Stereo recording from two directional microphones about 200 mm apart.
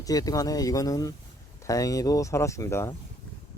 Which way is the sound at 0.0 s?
20° left (ahead or behind).